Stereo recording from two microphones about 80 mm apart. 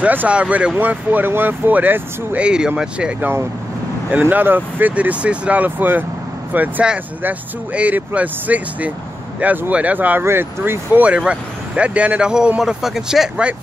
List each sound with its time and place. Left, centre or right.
0.0 s speech: centre
3.2 s speech: right; by 13.3 s centre